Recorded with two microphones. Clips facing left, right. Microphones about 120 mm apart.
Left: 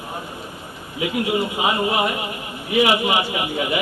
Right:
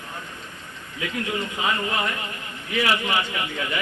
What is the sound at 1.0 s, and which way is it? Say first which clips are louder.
A man's voice: left 7 dB; 15° left (ahead or behind).